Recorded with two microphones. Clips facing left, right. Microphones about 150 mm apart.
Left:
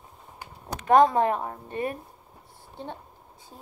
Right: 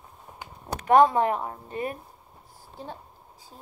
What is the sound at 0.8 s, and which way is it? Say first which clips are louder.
Speech: even; 45° left (ahead or behind).